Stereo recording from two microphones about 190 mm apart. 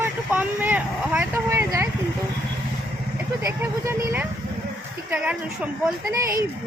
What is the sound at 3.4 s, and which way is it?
Speech, 15° right (ahead or behind).